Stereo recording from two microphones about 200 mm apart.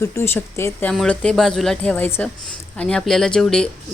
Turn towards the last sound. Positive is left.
turn(degrees=5)  # may be behind; listen again after turning